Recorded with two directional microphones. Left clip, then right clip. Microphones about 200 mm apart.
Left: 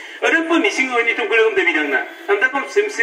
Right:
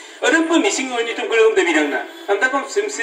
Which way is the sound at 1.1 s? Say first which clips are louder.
Right 3 dB; 30° right (ahead or behind).